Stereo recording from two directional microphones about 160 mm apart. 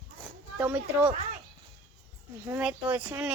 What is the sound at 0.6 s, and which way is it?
Speech, 10° right (ahead or behind).